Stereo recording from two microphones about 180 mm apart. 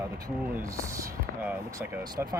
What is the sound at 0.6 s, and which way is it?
Speech, 15° right (ahead or behind).